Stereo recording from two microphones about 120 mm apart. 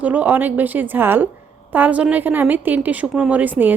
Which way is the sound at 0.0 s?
15° right (ahead or behind).